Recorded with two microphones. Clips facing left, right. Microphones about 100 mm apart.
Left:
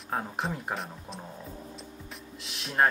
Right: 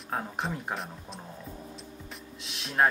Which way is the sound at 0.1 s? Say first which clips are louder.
Left 1 dB; centre (ahead or behind).